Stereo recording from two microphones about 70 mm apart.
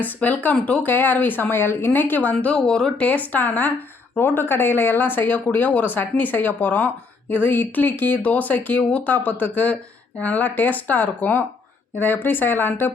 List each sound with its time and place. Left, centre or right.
0.0 s speech: left
2.3 s speech: centre; by 12.9 s left